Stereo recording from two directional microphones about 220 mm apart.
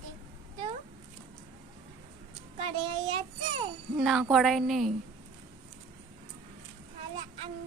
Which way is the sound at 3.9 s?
5° right (ahead or behind).